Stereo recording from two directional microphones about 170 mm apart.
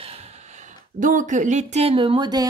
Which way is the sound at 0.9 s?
50° right (ahead or behind).